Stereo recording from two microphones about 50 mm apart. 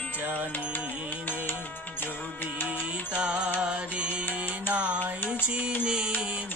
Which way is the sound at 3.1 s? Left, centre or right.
Right.